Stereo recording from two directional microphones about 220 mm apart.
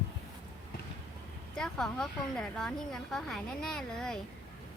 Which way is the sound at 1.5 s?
5° left (ahead or behind).